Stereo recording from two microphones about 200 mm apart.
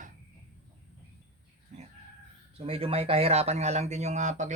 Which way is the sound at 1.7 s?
35° right (ahead or behind).